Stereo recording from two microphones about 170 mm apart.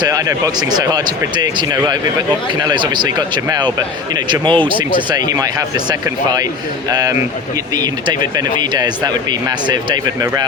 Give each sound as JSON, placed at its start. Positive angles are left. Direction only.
{"t": 0.0, "sound": "speech", "side_deg": -20}